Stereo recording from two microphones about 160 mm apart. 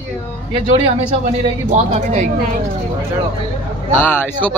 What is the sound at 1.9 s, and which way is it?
Speech, 50° right (ahead or behind).